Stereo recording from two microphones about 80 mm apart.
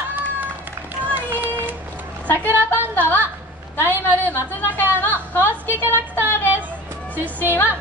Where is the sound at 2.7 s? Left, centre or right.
Left.